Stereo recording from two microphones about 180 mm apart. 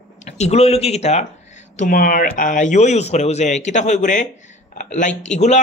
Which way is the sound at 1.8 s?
50° left (ahead or behind).